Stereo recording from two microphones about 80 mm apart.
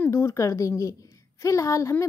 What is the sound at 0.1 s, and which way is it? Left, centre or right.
A woman's voice, left.